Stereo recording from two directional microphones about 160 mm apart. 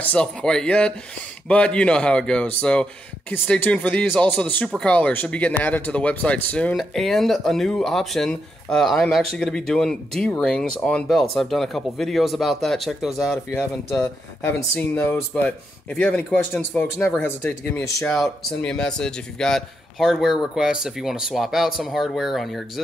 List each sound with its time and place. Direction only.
0.0 s speech: 5° left (ahead or behind)
13.5 s speech: 15° left (ahead or behind)
18.1 s speech: 5° left (ahead or behind)